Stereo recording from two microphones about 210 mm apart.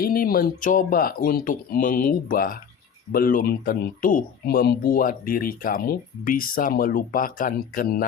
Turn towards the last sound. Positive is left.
turn(degrees=40)  # may be behind; listen again after turning